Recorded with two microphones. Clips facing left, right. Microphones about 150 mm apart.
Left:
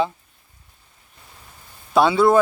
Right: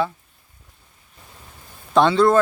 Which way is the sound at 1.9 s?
10° left (ahead or behind).